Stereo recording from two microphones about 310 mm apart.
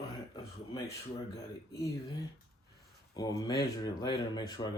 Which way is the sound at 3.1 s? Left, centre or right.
Centre.